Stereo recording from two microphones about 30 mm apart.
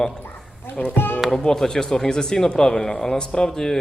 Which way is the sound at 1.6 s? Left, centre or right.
Centre.